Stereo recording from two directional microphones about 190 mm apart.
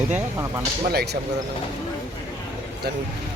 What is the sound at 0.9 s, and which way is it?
Speech, 60° right (ahead or behind).